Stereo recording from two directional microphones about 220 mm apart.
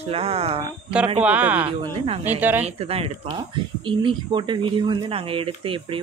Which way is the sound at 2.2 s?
10° right (ahead or behind).